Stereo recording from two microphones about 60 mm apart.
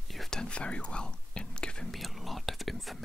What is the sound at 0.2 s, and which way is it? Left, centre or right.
Whispering, centre.